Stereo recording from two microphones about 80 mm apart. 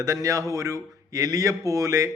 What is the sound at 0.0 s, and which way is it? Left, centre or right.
A man's voice, right.